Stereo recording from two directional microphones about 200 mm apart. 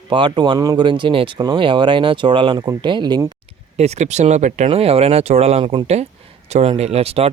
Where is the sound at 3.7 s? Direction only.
30° right (ahead or behind).